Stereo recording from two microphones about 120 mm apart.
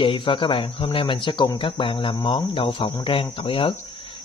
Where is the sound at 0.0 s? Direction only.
45° left (ahead or behind).